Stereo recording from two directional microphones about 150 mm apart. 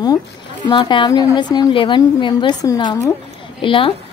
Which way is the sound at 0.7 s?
30° left (ahead or behind).